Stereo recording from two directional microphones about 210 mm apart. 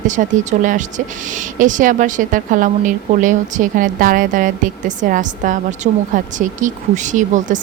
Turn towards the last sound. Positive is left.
turn(degrees=-35)  # may be behind; listen again after turning